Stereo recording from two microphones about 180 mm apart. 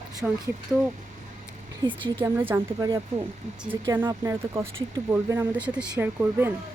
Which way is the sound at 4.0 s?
15° right (ahead or behind).